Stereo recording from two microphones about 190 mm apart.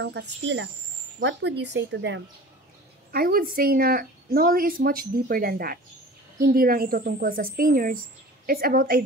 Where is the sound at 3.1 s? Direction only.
50° right (ahead or behind).